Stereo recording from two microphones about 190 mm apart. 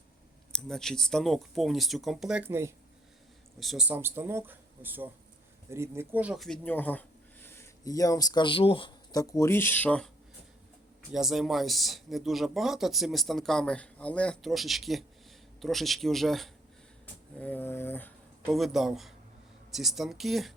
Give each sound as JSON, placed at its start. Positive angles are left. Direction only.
{"t": 0.5, "sound": "speech", "side_deg": 5}
{"t": 3.6, "sound": "speech", "side_deg": 0}
{"t": 11.1, "sound": "speech", "side_deg": 0}